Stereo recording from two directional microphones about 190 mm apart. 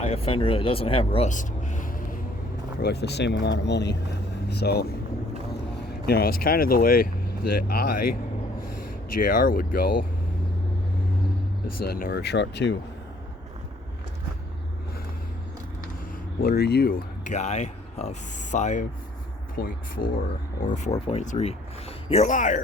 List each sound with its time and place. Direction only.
0.0 s speech: 30° left (ahead or behind)
1.3 s speech: 40° left (ahead or behind)
2.8 s speech: 60° left (ahead or behind)
11.8 s speech: 50° left (ahead or behind)
16.4 s speech: 55° left (ahead or behind)
19.6 s speech: 55° left (ahead or behind)
20.6 s speech: 40° left (ahead or behind)